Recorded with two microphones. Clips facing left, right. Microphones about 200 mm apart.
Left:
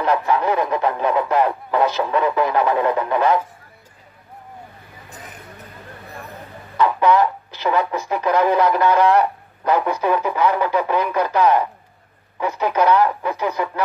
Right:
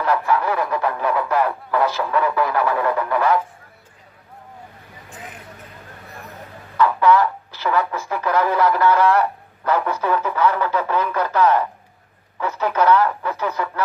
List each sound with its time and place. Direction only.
0.0 s speech: 20° left (ahead or behind)
6.8 s speech: 20° left (ahead or behind)